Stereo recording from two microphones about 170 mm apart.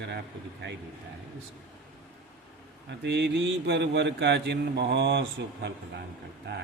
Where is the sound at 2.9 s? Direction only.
90° right.